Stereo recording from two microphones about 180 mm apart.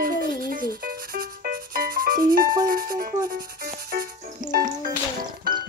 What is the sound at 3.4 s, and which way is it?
Music, 55° right (ahead or behind).